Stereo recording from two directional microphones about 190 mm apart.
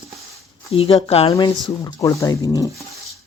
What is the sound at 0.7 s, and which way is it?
Speech, 30° left (ahead or behind).